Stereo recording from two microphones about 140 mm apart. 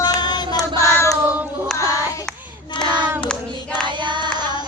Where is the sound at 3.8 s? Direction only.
35° right (ahead or behind).